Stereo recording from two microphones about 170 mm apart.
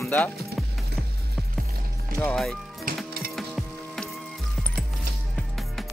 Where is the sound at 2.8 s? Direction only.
60° right (ahead or behind).